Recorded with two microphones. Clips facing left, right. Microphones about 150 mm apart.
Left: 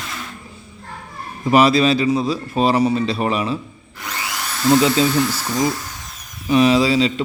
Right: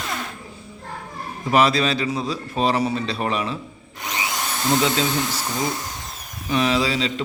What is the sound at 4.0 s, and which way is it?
Drill, 20° right (ahead or behind).